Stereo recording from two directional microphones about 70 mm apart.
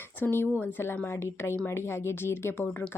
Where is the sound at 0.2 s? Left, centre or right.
Left.